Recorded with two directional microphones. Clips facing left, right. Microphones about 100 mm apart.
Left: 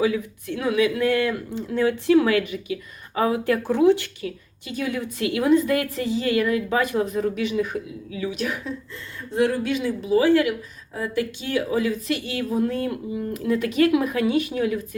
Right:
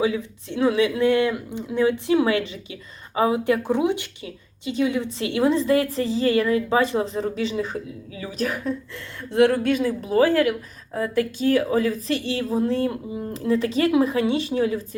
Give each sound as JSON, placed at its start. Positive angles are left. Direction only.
{"t": 0.0, "sound": "a woman's voice", "side_deg": -25}
{"t": 9.3, "sound": "a woman's voice", "side_deg": -65}